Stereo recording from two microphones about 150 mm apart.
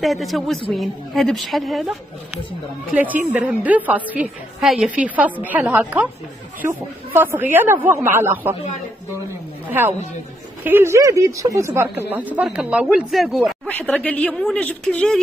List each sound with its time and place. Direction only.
0.0 s a woman's voice: centre (ahead or behind)
2.9 s a woman's voice: 10° right (ahead or behind)
9.7 s a woman's voice: 15° right (ahead or behind); by 15.1 s 10° left (ahead or behind)